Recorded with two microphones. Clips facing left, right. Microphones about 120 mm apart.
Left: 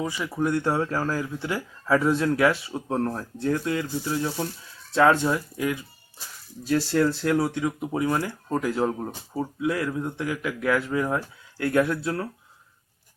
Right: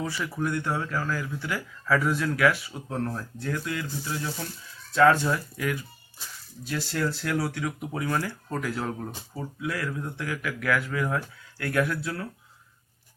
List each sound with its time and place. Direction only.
0.0 s speech: 15° left (ahead or behind)
0.3 s speech: 30° left (ahead or behind)